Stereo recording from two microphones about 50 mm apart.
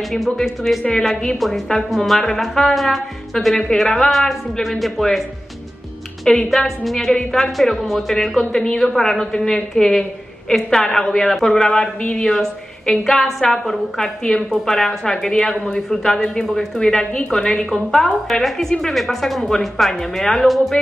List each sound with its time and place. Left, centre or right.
0.1 s speech: centre
6.2 s a woman's voice: centre
12.3 s a woman's voice: centre